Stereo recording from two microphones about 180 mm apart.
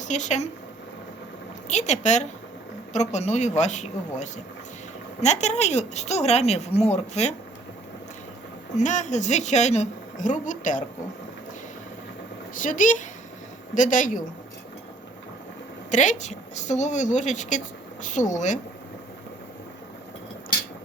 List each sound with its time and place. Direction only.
0.0 s speech: 40° left (ahead or behind)
1.7 s speech: 40° left (ahead or behind)
8.8 s a woman's voice: 45° left (ahead or behind)
12.5 s a woman's voice: 45° left (ahead or behind)
15.9 s a woman's voice: 40° left (ahead or behind)